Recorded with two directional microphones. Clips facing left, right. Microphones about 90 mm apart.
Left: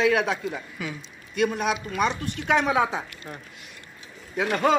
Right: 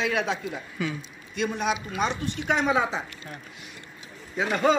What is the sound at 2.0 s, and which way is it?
A man's voice, 60° left (ahead or behind).